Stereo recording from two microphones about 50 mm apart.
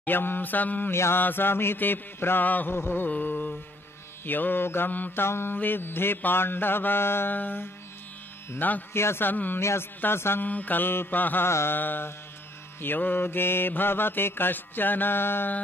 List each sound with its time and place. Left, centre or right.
0.0 s mantra: left
2.4 s mantra: left
2.7 s mantra: left
3.1 s mantra: left
5.2 s mantra: left
7.3 s mantra: left
8.9 s a sound: left
9.2 s mantra: left
9.6 s speech: left
10.0 s mantra: left
10.4 s mantra: left
11.4 s mantra: left